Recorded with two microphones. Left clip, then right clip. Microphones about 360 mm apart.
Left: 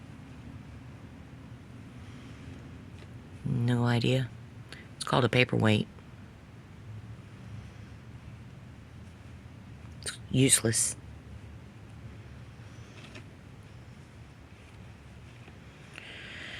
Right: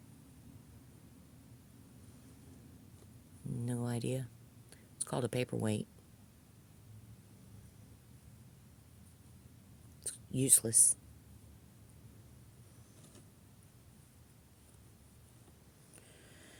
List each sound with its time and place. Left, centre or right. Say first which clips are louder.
3.7 s speech: left 11 dB; right
10.0 s speech: left 10 dB; right
16.0 s a sound: left 18 dB; right